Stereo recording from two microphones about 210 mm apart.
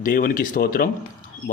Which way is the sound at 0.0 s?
40° left (ahead or behind).